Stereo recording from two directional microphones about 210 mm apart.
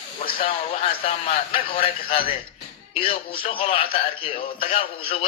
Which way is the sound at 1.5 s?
25° left (ahead or behind).